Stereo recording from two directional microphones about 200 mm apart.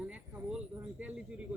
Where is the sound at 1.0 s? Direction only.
5° right (ahead or behind).